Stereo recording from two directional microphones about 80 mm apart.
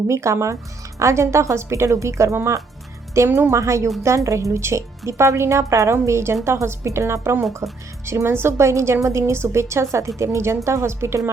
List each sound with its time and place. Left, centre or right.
0.1 s speech: right
3.2 s speech: right
3.5 s speech: right